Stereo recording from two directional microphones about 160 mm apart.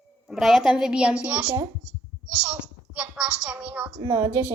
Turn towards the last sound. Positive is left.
turn(degrees=-20)  # may be behind; listen again after turning